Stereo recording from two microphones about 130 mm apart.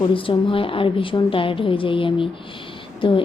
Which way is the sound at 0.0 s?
40° left (ahead or behind).